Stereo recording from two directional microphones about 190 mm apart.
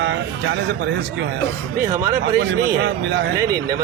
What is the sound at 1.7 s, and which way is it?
Speech, 15° right (ahead or behind).